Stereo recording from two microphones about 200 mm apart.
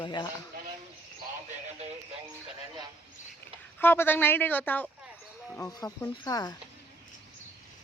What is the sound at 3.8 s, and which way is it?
Speech, 10° left (ahead or behind).